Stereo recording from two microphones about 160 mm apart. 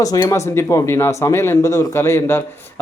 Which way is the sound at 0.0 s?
20° left (ahead or behind).